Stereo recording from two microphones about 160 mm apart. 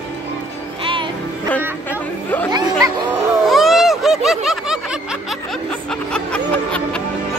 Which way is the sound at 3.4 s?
Centre (ahead or behind).